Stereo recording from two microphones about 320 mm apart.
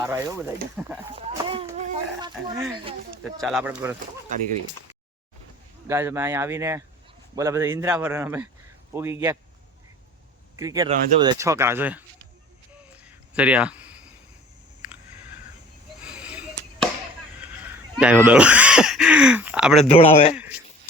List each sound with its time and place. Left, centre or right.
0.0 s speech: centre
1.1 s a sound: centre
2.3 s speech: centre
5.9 s speech: centre
10.6 s speech: centre
13.1 s a sound: centre
16.0 s arrow: centre
17.4 s speech: centre
19.8 s speech: centre
20.3 s a man's voice: centre